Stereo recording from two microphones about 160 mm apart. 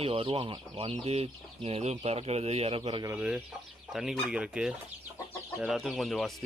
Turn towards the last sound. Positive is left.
turn(degrees=0)  # may be behind; listen again after turning